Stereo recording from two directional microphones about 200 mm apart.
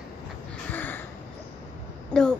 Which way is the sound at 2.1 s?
5° left (ahead or behind).